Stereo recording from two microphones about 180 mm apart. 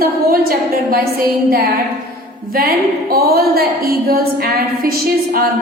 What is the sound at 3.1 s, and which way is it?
A woman's voice, 55° right (ahead or behind).